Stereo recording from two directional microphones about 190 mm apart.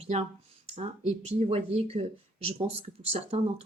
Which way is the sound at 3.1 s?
30° right (ahead or behind).